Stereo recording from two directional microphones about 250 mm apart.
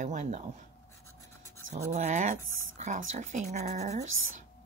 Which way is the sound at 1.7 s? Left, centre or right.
Right.